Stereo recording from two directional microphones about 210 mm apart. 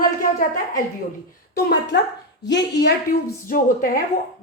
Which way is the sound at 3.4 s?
40° left (ahead or behind).